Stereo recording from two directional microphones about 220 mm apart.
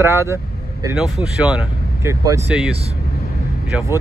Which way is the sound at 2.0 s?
15° right (ahead or behind).